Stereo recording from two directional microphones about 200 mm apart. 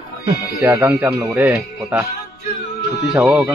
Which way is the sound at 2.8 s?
55° left (ahead or behind).